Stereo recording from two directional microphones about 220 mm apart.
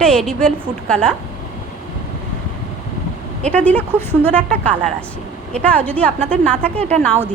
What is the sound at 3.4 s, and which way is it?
A woman's voice, 5° left (ahead or behind).